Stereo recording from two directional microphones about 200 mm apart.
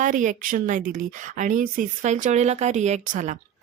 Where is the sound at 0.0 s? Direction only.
40° right (ahead or behind).